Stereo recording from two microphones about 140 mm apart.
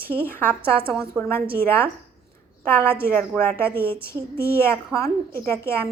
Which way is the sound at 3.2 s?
15° left (ahead or behind).